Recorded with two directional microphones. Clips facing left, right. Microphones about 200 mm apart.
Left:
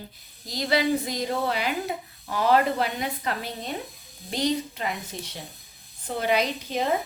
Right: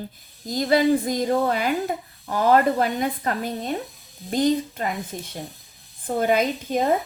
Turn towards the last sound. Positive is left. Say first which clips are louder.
# right 4 dB
turn(degrees=-50)  # may be behind; listen again after turning